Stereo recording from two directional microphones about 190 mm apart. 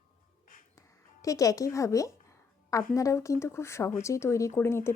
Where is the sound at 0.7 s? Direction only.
15° left (ahead or behind).